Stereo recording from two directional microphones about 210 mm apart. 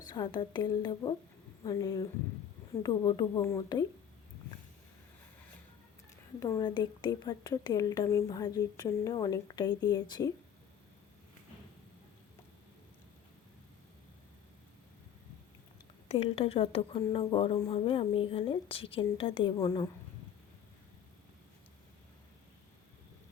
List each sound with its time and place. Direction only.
0.1 s a woman's voice: 20° left (ahead or behind)
6.4 s a woman's voice: 20° left (ahead or behind)
16.0 s speech: 30° left (ahead or behind)